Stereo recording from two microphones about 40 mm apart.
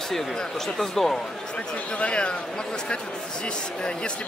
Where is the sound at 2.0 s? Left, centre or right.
Left.